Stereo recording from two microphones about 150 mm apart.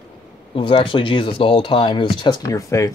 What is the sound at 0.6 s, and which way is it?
Speech, 35° left (ahead or behind).